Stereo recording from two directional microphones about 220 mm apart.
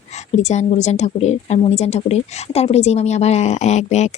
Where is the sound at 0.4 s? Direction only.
30° left (ahead or behind).